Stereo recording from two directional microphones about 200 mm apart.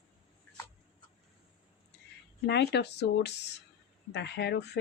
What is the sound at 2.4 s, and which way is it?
A woman's voice, 55° left (ahead or behind).